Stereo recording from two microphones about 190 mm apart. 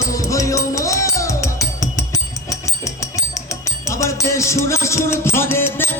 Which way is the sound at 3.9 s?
15° left (ahead or behind).